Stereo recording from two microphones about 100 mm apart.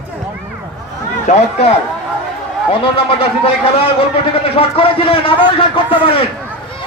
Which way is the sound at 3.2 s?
70° left (ahead or behind).